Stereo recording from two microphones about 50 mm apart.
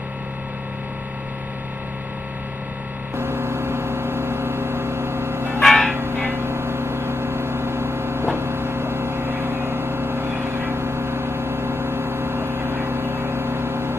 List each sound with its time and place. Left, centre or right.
3.2 s vehicle: right
5.6 s church bell: centre
5.9 s a sound: right